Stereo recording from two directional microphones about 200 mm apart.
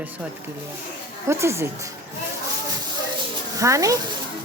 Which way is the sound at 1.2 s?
15° right (ahead or behind).